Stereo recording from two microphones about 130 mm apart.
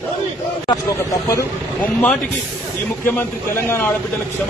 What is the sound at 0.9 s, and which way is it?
Speech, 25° left (ahead or behind).